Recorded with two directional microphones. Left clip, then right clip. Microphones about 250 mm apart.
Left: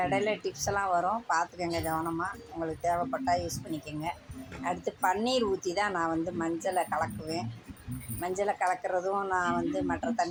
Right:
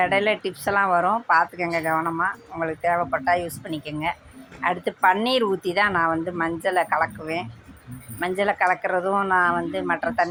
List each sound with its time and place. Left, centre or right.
0.0 s speech: right
4.6 s speech: right